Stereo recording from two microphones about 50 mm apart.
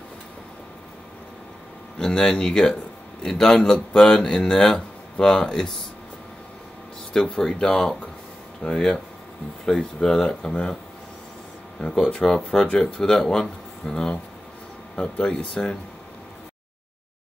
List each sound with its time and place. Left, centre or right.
2.0 s a man's voice: centre
7.3 s a man's voice: centre
11.8 s a man's voice: centre